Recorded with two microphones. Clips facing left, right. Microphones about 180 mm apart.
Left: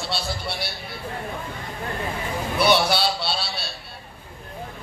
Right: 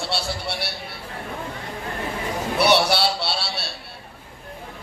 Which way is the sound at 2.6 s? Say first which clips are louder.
Right 1 dB; 70° right (ahead or behind).